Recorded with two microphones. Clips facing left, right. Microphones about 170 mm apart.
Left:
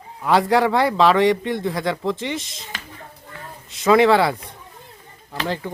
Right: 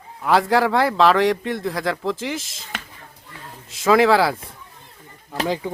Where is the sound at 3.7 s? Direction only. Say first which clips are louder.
Left 1 dB; centre (ahead or behind).